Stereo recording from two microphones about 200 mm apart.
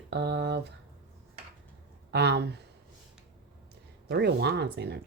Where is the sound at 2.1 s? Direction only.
55° right (ahead or behind).